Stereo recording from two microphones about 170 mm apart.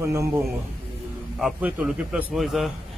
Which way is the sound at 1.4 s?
5° right (ahead or behind).